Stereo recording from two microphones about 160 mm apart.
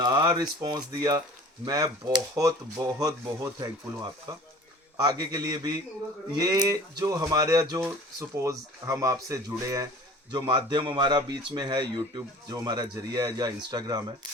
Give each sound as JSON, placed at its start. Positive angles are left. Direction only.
{"t": 0.0, "sound": "speech", "side_deg": -25}